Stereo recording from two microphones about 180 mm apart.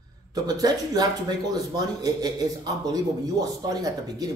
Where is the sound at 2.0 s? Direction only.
20° right (ahead or behind).